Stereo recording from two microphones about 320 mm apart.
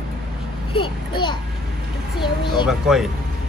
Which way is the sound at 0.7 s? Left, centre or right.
Centre.